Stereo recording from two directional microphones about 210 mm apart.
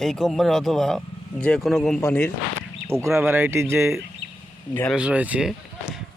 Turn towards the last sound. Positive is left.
turn(degrees=-5)  # may be behind; listen again after turning